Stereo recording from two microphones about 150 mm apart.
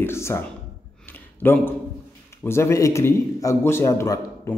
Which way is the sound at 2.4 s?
15° left (ahead or behind).